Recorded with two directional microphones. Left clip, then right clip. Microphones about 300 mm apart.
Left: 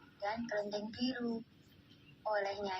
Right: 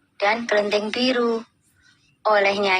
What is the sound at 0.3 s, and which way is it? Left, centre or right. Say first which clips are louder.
A woman's voice: right 18 dB; right.